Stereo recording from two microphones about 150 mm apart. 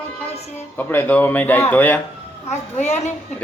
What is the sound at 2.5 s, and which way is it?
Speech, 50° left (ahead or behind).